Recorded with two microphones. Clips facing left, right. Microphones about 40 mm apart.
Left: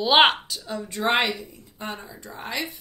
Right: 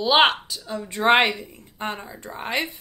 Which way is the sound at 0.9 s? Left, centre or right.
Right.